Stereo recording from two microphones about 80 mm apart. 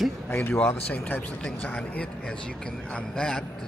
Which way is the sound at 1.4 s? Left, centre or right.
Centre.